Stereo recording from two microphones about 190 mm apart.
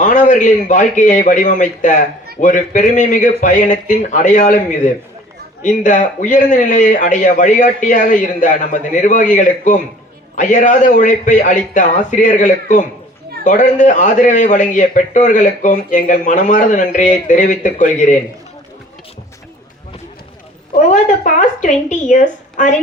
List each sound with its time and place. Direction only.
0.0 s a man's voice: 40° left (ahead or behind)
20.7 s a man's voice: 40° left (ahead or behind)